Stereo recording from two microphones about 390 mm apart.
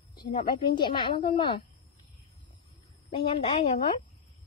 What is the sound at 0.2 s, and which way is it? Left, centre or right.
A woman's voice, centre.